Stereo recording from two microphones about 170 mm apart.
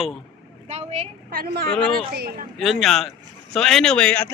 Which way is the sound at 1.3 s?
65° right (ahead or behind).